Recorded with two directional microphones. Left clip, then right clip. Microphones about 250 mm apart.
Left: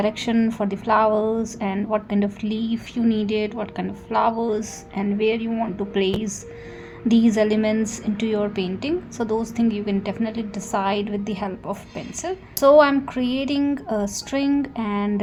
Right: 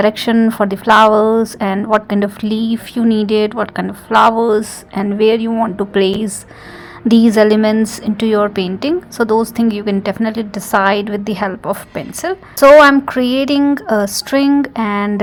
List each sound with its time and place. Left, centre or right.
0.0 s a woman's voice: right